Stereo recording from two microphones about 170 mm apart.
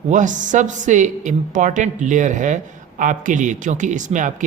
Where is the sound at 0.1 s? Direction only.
45° right (ahead or behind).